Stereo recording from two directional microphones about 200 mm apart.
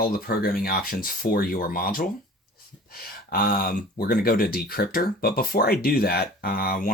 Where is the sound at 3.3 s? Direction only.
45° left (ahead or behind).